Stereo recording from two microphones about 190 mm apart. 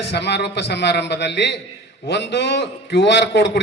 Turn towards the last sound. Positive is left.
turn(degrees=65)  # may be behind; listen again after turning